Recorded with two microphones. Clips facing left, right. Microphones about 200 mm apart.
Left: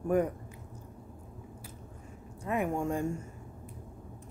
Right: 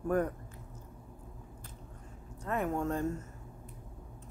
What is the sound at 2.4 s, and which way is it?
Speech, 10° left (ahead or behind).